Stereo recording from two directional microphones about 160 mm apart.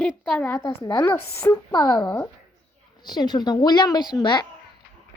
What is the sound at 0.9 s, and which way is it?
Speech, 10° left (ahead or behind).